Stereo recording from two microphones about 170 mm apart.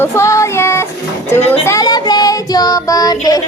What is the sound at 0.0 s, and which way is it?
Child singing, 15° left (ahead or behind).